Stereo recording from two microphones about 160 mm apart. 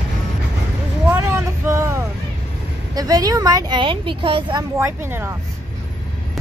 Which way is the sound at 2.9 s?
25° right (ahead or behind).